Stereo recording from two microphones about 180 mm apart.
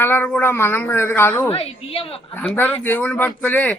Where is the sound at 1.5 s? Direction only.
35° left (ahead or behind).